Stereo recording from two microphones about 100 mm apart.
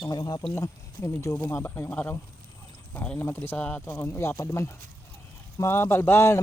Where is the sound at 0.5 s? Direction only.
25° left (ahead or behind).